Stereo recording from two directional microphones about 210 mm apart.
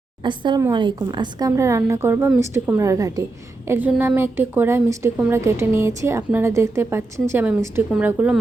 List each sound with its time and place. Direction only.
0.2 s a woman's voice: 20° right (ahead or behind); by 8.4 s 5° right (ahead or behind)